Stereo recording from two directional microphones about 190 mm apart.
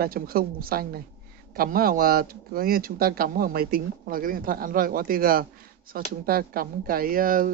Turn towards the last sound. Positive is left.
turn(degrees=-45)  # may be behind; listen again after turning